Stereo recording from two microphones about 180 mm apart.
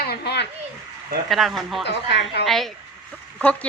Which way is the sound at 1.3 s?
Centre (ahead or behind).